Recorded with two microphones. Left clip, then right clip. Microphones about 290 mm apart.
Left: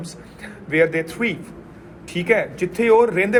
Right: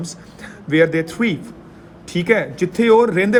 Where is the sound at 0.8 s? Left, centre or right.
Right.